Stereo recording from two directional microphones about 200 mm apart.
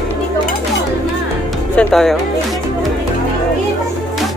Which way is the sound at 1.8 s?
Centre (ahead or behind).